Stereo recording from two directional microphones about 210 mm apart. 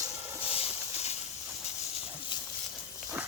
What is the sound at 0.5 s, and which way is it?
Horse, 30° left (ahead or behind).